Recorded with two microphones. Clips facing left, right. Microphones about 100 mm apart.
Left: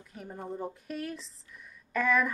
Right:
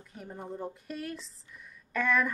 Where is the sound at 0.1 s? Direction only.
Centre (ahead or behind).